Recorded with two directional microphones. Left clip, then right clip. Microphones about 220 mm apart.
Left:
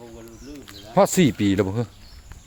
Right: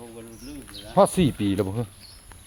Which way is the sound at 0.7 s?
25° left (ahead or behind).